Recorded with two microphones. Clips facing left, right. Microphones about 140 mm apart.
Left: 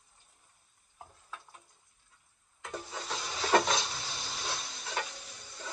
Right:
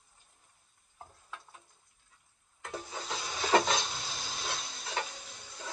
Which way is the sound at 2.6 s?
5° right (ahead or behind).